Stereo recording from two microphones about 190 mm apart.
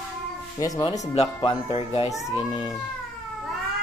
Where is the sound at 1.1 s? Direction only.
30° left (ahead or behind).